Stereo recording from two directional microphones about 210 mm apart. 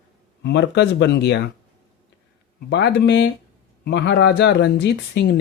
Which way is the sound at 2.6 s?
55° left (ahead or behind).